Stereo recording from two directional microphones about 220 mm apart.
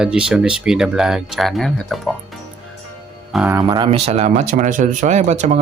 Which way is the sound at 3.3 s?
10° right (ahead or behind).